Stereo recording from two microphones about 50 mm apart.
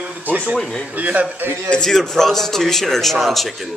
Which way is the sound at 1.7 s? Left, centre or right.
Centre.